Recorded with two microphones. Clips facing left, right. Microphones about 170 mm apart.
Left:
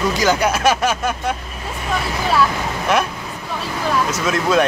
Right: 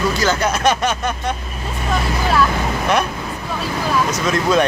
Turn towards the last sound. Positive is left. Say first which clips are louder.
# right 1 dB
turn(degrees=5)  # may be behind; listen again after turning